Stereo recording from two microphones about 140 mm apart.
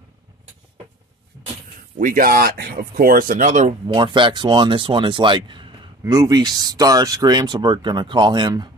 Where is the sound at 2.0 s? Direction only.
80° right; by 3.7 s 60° right (ahead or behind).